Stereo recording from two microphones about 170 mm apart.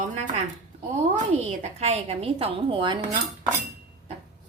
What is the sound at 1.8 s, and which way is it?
A woman's voice, 40° right (ahead or behind).